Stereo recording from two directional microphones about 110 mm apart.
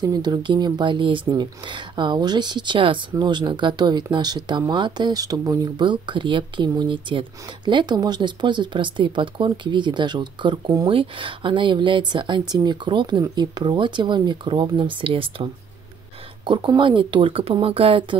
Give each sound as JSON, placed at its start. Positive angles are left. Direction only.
{"t": 0.0, "sound": "speech", "side_deg": -35}
{"t": 5.9, "sound": "speech", "side_deg": -45}
{"t": 16.4, "sound": "speech", "side_deg": -45}